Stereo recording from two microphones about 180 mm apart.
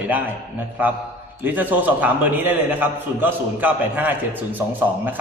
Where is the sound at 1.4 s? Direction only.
10° right (ahead or behind).